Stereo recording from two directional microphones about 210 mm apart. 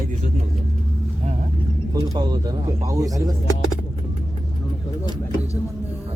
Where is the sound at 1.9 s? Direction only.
20° right (ahead or behind).